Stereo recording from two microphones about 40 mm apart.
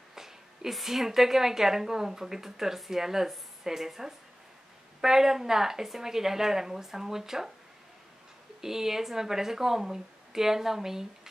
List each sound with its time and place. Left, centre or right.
0.1 s a woman's voice: centre
8.5 s a woman's voice: centre